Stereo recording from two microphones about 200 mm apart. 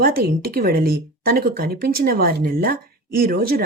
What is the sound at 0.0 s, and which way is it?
Speech, 50° right (ahead or behind).